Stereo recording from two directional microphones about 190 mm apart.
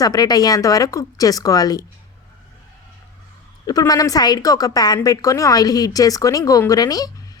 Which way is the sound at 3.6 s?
20° left (ahead or behind).